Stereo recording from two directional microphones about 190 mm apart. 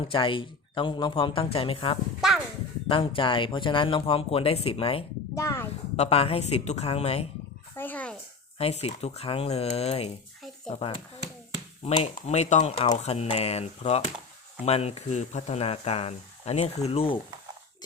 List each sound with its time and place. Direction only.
0.0 s speech: 25° left (ahead or behind)
5.3 s a child's voice: 15° left (ahead or behind)
6.0 s speech: 30° left (ahead or behind)
7.8 s speech: 10° left (ahead or behind)
8.5 s speech: 30° left (ahead or behind)